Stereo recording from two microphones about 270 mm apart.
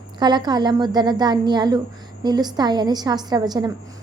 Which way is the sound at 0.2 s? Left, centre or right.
Centre.